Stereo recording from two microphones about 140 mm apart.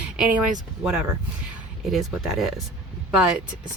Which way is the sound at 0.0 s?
10° right (ahead or behind).